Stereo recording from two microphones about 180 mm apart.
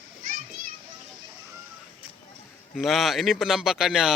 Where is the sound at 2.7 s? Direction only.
Centre (ahead or behind).